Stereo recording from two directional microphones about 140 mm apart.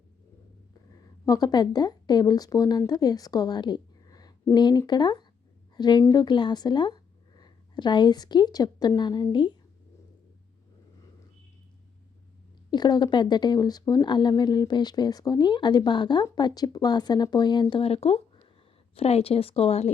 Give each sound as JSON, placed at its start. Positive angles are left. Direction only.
{"t": 0.7, "sound": "a woman's voice", "side_deg": 25}
{"t": 12.7, "sound": "a woman's voice", "side_deg": 30}